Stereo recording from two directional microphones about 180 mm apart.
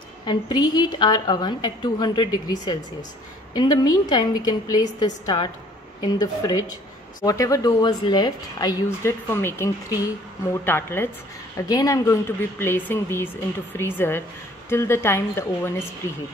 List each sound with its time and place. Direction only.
0.3 s a woman's voice: 25° left (ahead or behind)